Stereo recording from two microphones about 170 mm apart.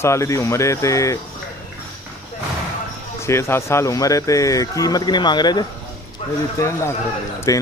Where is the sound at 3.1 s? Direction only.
15° left (ahead or behind).